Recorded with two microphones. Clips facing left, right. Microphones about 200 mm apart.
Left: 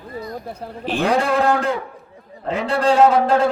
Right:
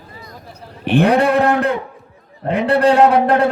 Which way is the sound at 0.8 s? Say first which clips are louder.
Right 6 dB; 60° right (ahead or behind).